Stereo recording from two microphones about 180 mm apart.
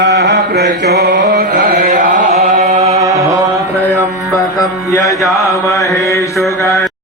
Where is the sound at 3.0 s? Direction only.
20° right (ahead or behind).